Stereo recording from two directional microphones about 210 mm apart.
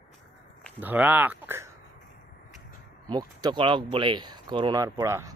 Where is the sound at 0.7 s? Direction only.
10° right (ahead or behind).